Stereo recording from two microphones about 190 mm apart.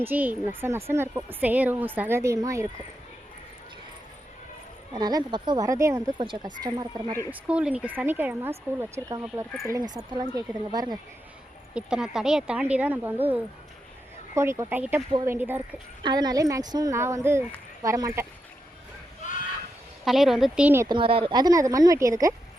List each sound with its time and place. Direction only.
0.0 s speech: 10° right (ahead or behind)
4.9 s a woman's voice: 20° right (ahead or behind)
11.7 s speech: 5° right (ahead or behind)
19.2 s fowl: 40° left (ahead or behind)
20.1 s speech: centre (ahead or behind)
20.8 s a woman's voice: 25° right (ahead or behind)